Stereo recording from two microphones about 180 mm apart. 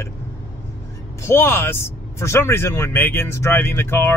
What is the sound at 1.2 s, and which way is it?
Speech, 10° left (ahead or behind).